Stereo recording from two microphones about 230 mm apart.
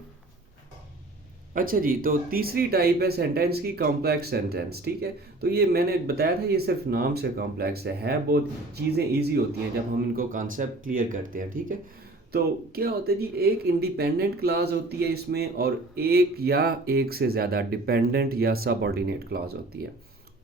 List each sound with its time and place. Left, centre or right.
1.5 s speech: right